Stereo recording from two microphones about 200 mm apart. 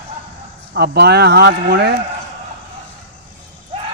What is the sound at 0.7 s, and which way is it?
Speech, 55° right (ahead or behind).